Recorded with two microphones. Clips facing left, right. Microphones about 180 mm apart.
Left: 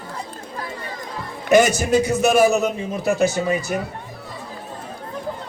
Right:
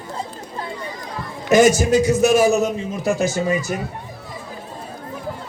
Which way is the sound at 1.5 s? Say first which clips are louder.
Right 2 dB; 60° left (ahead or behind).